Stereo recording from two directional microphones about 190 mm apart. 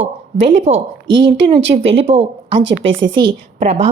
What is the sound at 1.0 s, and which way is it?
A woman's voice, 25° right (ahead or behind).